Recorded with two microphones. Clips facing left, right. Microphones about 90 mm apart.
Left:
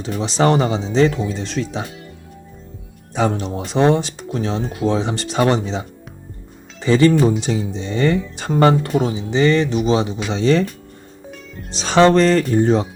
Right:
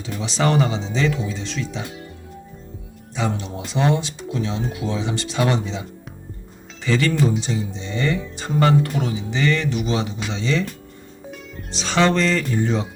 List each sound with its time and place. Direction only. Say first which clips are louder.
0.0 s speech: left 5 dB; 35° left (ahead or behind)
3.2 s speech: left 6 dB; 50° left (ahead or behind)
6.8 s speech: left 7 dB; 30° left (ahead or behind)
7.3 s speech: left 4 dB; 60° left (ahead or behind)
7.8 s speech: left 7 dB; 40° left (ahead or behind)
8.6 s speech: left 4 dB; 35° left (ahead or behind)
11.7 s speech: left 6 dB; 40° left (ahead or behind)